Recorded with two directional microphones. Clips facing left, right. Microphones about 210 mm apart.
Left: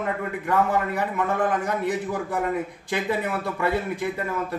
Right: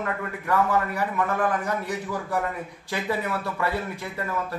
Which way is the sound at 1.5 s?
20° left (ahead or behind).